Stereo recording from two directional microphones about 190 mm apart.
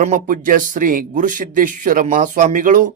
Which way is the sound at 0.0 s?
45° right (ahead or behind).